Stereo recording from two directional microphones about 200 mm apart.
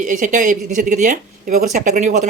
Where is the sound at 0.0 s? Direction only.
40° right (ahead or behind).